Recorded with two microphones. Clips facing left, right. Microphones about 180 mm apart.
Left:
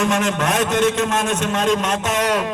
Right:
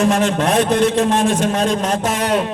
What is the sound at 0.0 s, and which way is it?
A man's voice, 35° right (ahead or behind).